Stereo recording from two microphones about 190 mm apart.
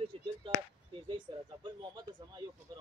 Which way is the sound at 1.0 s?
25° right (ahead or behind).